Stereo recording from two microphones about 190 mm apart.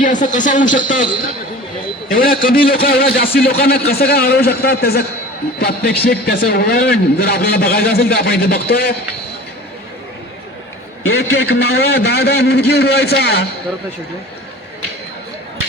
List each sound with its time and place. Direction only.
0.0 s speech: 40° left (ahead or behind)
2.1 s a man's voice: 50° left (ahead or behind)
11.2 s a man's voice: 60° left (ahead or behind)